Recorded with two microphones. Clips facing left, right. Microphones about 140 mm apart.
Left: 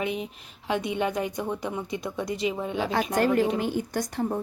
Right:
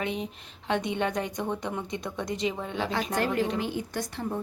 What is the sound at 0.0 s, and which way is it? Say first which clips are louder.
A woman's voice: left 2 dB; 5° left (ahead or behind).